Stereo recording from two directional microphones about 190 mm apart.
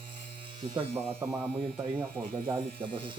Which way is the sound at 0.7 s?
30° right (ahead or behind).